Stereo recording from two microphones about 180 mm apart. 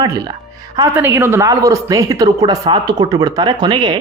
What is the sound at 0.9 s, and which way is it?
Speech, 10° right (ahead or behind).